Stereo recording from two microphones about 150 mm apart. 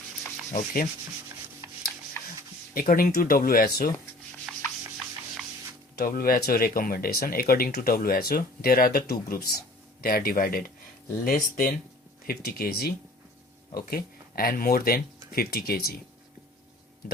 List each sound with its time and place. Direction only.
0.5 s speech: 70° left (ahead or behind)
2.2 s a sound: 15° left (ahead or behind)
2.9 s speech: 75° left (ahead or behind)
6.0 s speech: 80° left